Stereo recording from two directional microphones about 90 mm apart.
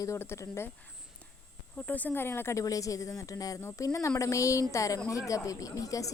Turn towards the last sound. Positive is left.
turn(degrees=40)  # may be behind; listen again after turning